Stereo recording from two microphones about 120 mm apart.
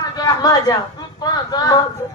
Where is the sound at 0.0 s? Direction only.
30° left (ahead or behind).